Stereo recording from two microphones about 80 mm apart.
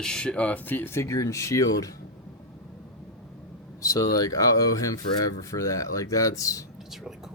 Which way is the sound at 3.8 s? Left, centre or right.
Left.